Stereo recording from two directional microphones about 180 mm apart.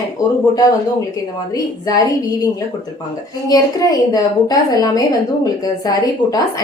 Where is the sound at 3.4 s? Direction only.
20° left (ahead or behind).